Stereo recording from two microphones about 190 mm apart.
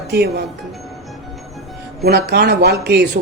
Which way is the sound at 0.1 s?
60° right (ahead or behind).